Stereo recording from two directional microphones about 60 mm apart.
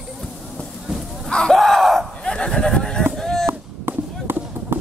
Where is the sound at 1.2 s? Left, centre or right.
Centre.